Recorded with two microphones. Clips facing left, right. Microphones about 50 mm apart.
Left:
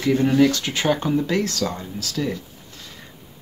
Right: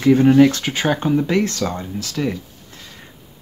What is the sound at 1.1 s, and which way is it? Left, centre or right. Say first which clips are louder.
Speech: right 3 dB; right.